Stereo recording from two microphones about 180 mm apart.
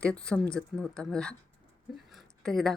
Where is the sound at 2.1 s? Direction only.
Centre (ahead or behind).